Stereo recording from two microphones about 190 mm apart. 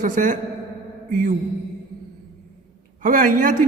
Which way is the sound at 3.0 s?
45° right (ahead or behind).